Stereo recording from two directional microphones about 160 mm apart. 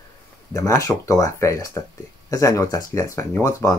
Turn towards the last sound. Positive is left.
turn(degrees=20)  # may be behind; listen again after turning